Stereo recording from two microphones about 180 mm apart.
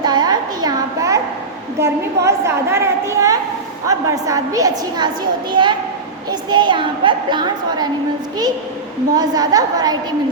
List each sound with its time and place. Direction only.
0.0 s a sound: 25° right (ahead or behind)
1.8 s a woman's voice: 15° right (ahead or behind)
9.1 s a woman's voice: 20° right (ahead or behind)